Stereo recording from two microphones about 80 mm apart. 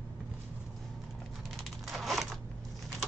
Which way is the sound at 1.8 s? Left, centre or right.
Centre.